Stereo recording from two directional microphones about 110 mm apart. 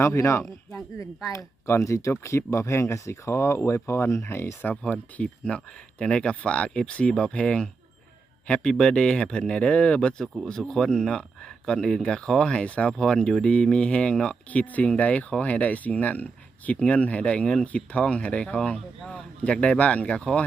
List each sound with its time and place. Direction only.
0.0 s speech: 25° left (ahead or behind)
4.7 s speech: 10° left (ahead or behind)